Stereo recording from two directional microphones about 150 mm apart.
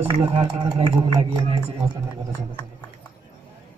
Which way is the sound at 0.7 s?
40° right (ahead or behind).